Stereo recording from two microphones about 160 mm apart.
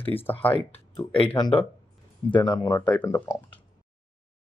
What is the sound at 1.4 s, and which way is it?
Speech, 30° left (ahead or behind).